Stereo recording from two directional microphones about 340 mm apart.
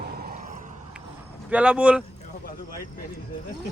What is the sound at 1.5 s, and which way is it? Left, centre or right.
Speech, centre.